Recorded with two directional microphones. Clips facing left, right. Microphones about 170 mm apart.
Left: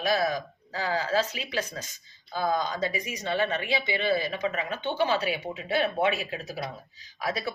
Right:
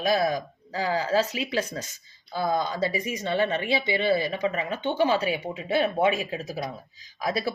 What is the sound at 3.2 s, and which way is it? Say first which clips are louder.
Speech: right 2 dB; 30° right (ahead or behind).